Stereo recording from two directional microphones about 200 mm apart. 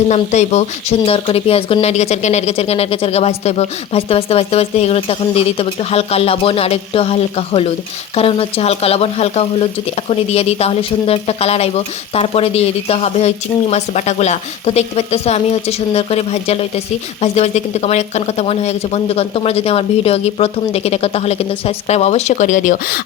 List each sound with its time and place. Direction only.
0.1 s speech: 35° left (ahead or behind)